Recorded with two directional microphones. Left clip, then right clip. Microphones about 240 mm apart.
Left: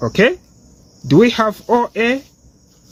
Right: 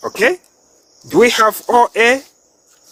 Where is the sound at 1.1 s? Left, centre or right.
Right.